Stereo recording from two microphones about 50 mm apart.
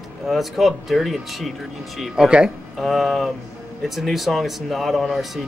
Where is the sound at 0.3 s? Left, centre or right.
Centre.